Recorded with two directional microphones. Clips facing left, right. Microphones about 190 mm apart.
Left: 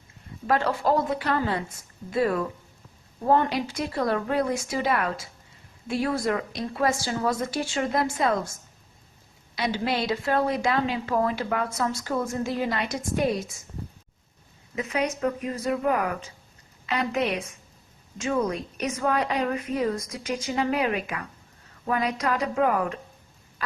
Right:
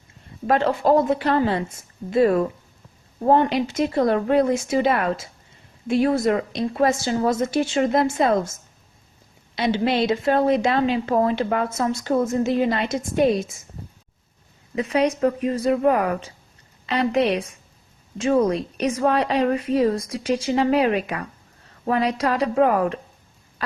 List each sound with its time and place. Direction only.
0.4 s a woman's voice: 25° right (ahead or behind)
3.5 s a woman's voice: 25° right (ahead or behind)
9.6 s a woman's voice: 25° right (ahead or behind)
14.8 s speech: 30° right (ahead or behind)